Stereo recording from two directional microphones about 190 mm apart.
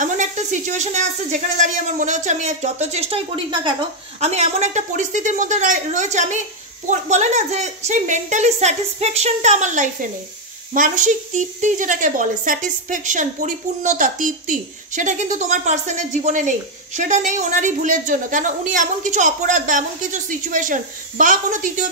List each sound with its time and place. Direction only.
0.0 s speech: 40° right (ahead or behind); by 3.7 s 25° right (ahead or behind)
4.2 s a woman's voice: 35° right (ahead or behind)